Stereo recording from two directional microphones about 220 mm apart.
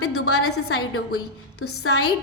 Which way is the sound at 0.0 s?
90° left.